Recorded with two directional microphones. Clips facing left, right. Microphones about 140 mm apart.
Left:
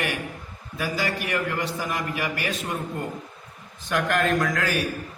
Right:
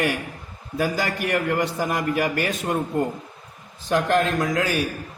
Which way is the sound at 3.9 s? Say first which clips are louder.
Right 3 dB; 30° right (ahead or behind).